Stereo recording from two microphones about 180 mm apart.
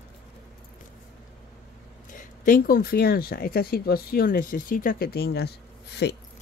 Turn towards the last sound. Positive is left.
turn(degrees=65)  # may be behind; listen again after turning